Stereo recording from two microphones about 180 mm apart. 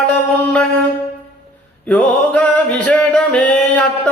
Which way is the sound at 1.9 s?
10° left (ahead or behind).